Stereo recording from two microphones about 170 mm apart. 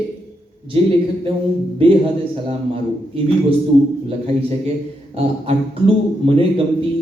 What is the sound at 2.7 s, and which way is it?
Speech, 35° right (ahead or behind).